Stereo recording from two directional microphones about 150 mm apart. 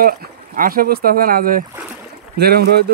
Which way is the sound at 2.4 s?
90° right.